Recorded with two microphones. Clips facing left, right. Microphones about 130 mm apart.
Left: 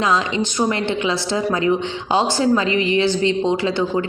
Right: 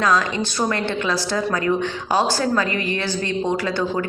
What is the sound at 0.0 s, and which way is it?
Speech, 20° left (ahead or behind).